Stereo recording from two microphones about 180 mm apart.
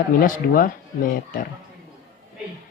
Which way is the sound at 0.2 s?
50° left (ahead or behind).